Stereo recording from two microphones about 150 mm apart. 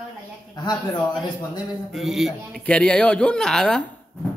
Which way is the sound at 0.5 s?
30° left (ahead or behind).